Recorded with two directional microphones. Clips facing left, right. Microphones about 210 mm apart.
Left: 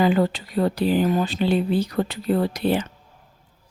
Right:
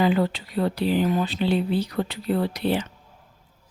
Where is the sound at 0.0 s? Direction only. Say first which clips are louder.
Left 2 dB; 45° left (ahead or behind).